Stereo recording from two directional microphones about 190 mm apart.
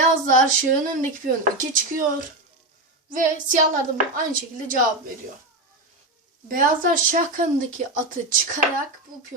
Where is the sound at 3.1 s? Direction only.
45° right (ahead or behind).